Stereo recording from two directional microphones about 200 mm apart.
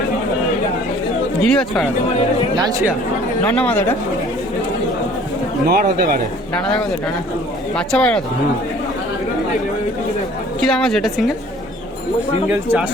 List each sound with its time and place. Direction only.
1.4 s a woman's voice: 5° left (ahead or behind)
2.6 s speech: 20° right (ahead or behind)
3.4 s speech: 10° left (ahead or behind)
5.6 s a man's voice: 45° right (ahead or behind)
7.8 s a woman's voice: 5° left (ahead or behind)
10.6 s a woman's voice: 5° left (ahead or behind)
12.5 s speech: 5° right (ahead or behind)